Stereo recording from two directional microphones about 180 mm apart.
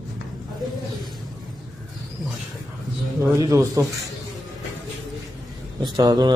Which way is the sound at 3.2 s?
20° right (ahead or behind).